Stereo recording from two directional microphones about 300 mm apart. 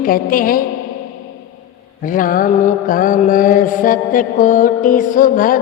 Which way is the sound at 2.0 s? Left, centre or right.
Left.